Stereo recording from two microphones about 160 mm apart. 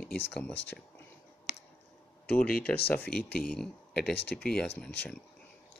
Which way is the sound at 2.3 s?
65° left (ahead or behind).